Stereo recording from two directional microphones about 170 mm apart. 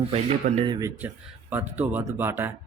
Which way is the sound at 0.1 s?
35° right (ahead or behind).